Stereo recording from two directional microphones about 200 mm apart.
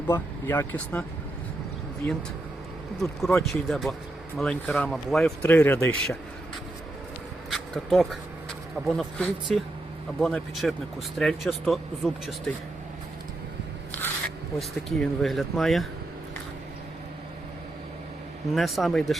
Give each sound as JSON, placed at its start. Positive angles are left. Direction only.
{"t": 0.1, "sound": "speech", "side_deg": 15}
{"t": 7.5, "sound": "speech", "side_deg": 0}
{"t": 14.8, "sound": "speech", "side_deg": 0}
{"t": 18.5, "sound": "speech", "side_deg": 0}